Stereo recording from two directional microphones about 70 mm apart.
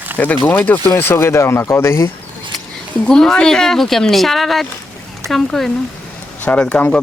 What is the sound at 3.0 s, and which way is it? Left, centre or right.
Speech, centre.